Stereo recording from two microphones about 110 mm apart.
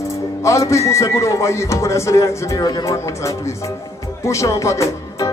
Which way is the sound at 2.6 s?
35° left (ahead or behind).